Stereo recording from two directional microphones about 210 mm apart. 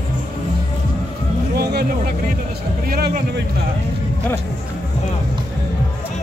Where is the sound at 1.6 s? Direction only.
50° right (ahead or behind).